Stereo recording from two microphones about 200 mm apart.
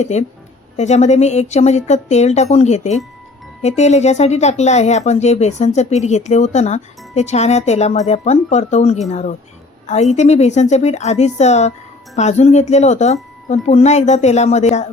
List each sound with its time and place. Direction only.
0.0 s speech: 35° left (ahead or behind)